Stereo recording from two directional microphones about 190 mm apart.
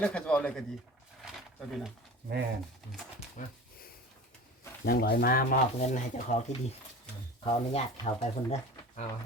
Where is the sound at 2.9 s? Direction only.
Centre (ahead or behind).